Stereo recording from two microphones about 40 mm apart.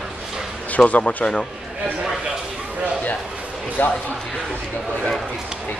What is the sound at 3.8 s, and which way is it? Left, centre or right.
Speech, left.